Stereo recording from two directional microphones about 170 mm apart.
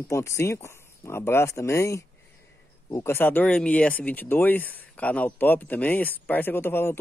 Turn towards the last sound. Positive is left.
turn(degrees=15)  # may be behind; listen again after turning